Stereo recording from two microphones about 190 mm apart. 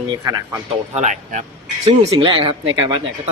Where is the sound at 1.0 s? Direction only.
35° right (ahead or behind).